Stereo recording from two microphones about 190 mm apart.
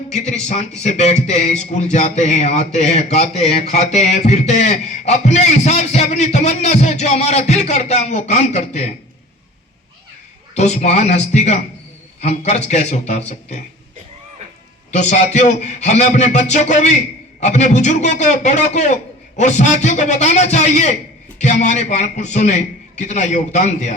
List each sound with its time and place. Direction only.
0.1 s a man's voice: 35° left (ahead or behind)
10.5 s a man's voice: 35° left (ahead or behind)
14.9 s a man's voice: 35° left (ahead or behind)